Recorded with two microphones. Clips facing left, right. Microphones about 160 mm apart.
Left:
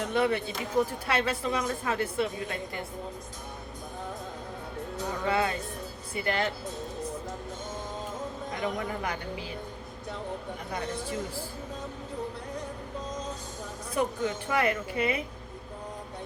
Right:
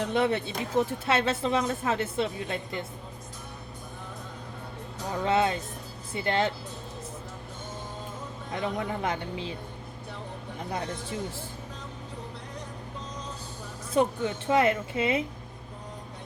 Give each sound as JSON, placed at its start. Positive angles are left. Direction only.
{"t": 0.1, "sound": "speech", "side_deg": -25}
{"t": 5.2, "sound": "speech", "side_deg": -25}
{"t": 8.6, "sound": "speech", "side_deg": -25}
{"t": 13.9, "sound": "speech", "side_deg": -25}